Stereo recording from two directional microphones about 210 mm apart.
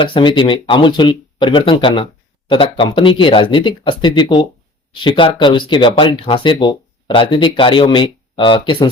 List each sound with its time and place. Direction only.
0.0 s speech: 25° left (ahead or behind)